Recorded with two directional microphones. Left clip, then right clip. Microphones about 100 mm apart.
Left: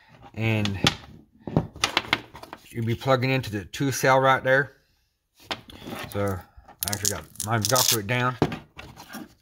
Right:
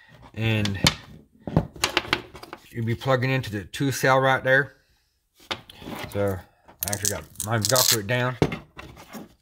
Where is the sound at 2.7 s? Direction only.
10° left (ahead or behind).